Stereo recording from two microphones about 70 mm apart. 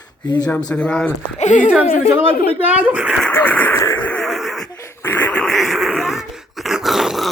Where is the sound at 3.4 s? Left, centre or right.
Left.